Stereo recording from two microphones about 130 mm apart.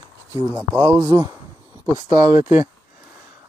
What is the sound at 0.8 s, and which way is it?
Speech, 25° right (ahead or behind).